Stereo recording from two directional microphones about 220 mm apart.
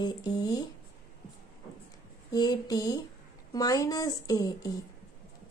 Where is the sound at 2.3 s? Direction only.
15° left (ahead or behind).